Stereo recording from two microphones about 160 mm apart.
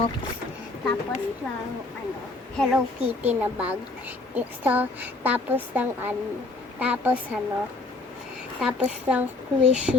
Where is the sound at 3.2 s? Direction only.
10° right (ahead or behind).